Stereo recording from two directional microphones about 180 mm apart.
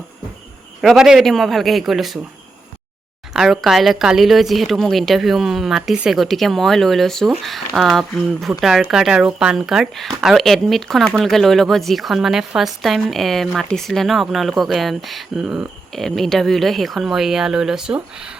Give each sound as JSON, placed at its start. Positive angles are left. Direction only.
{"t": 0.8, "sound": "speech", "side_deg": 0}
{"t": 3.3, "sound": "speech", "side_deg": 0}